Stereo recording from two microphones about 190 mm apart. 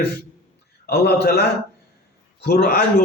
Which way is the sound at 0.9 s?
60° left (ahead or behind).